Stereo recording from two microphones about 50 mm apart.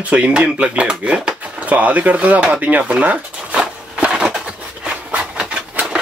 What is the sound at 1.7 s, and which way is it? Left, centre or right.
Speech, right.